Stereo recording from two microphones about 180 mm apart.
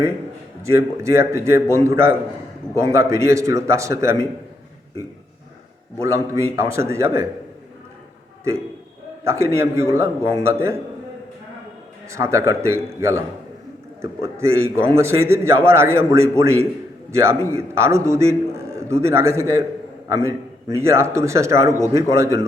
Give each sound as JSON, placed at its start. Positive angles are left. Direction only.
{"t": 0.6, "sound": "a man's voice", "side_deg": -15}
{"t": 6.0, "sound": "a man's voice", "side_deg": -15}
{"t": 9.2, "sound": "a man's voice", "side_deg": -15}
{"t": 12.1, "sound": "a man's voice", "side_deg": -15}